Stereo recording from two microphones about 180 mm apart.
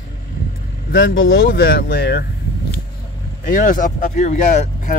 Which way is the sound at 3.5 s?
45° left (ahead or behind).